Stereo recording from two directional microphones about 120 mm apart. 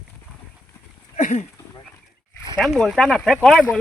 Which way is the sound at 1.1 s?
90° left.